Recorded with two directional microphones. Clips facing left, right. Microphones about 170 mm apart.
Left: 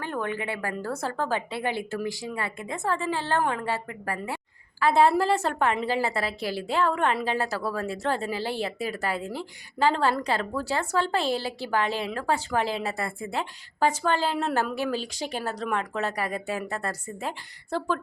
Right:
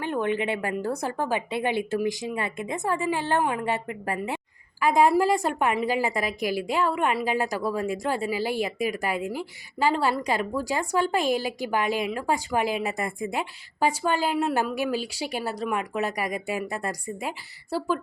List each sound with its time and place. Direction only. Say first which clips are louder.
0.0 s a woman's voice: right 4 dB; 20° right (ahead or behind)